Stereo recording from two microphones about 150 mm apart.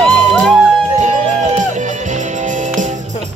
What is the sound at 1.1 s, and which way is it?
Music, 50° right (ahead or behind).